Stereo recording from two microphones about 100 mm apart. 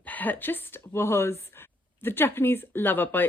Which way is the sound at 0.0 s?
15° left (ahead or behind).